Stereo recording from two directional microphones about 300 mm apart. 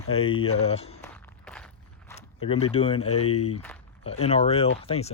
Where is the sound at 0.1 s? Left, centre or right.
Centre.